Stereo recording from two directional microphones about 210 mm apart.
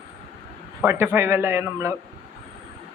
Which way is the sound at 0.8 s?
10° right (ahead or behind).